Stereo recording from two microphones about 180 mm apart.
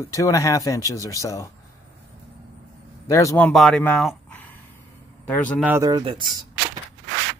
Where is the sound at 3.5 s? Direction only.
Centre (ahead or behind).